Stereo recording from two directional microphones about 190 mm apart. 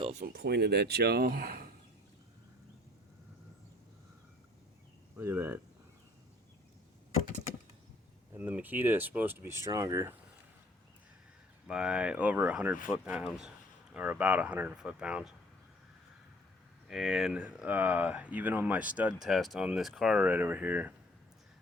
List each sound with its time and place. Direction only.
0.0 s a sound: 35° right (ahead or behind)
0.3 s speech: 60° right (ahead or behind)
5.1 s speech: 10° right (ahead or behind)
8.4 s speech: 10° right (ahead or behind)
11.7 s speech: 5° right (ahead or behind)
16.9 s speech: centre (ahead or behind)